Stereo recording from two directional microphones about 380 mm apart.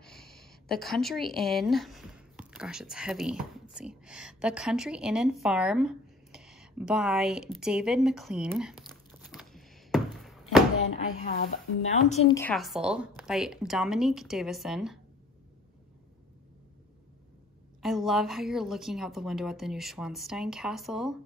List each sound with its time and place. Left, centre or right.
0.0 s speech: centre
11.1 s a woman's voice: centre
17.8 s a woman's voice: centre